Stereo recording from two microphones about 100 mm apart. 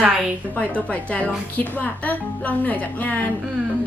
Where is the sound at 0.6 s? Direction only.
15° left (ahead or behind).